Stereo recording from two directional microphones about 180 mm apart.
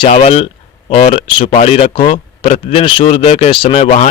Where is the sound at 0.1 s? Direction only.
35° left (ahead or behind).